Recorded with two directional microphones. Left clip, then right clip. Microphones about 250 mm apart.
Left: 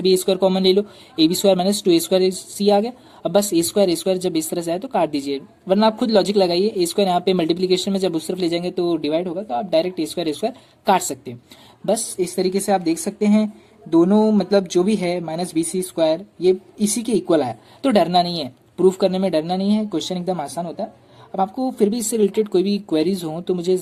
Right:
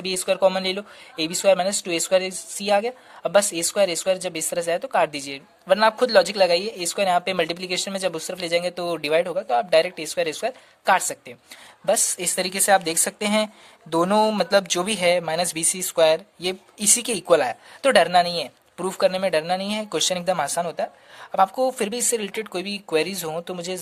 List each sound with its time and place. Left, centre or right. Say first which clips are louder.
0.0 s speech: left 3 dB; centre